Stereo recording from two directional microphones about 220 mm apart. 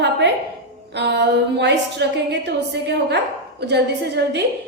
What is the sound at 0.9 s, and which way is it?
A woman's voice, 50° right (ahead or behind).